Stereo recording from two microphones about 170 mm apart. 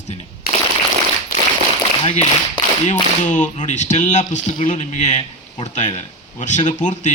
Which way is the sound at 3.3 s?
45° left (ahead or behind).